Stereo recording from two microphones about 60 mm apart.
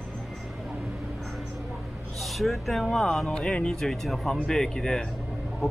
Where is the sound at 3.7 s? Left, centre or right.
Centre.